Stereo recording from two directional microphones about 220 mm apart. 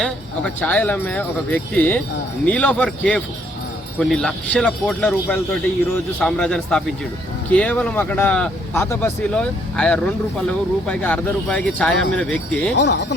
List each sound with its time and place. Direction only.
0.0 s speech: 5° left (ahead or behind)
12.7 s speech: 50° left (ahead or behind)